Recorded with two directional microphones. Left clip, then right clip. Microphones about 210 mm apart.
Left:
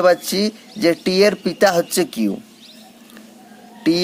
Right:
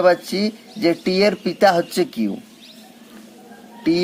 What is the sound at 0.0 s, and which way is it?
Speech, 25° left (ahead or behind).